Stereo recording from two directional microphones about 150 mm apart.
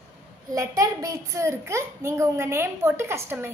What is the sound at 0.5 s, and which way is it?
A woman's voice, 20° right (ahead or behind).